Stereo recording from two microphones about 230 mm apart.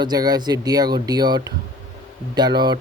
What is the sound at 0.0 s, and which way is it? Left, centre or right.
Speech, centre.